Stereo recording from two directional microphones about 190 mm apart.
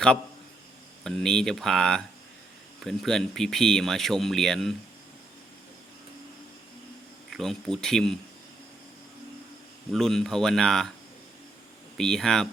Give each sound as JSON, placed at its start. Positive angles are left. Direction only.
{"t": 1.0, "sound": "speech", "side_deg": 5}
{"t": 7.3, "sound": "speech", "side_deg": 0}
{"t": 9.9, "sound": "speech", "side_deg": 0}
{"t": 11.9, "sound": "speech", "side_deg": 5}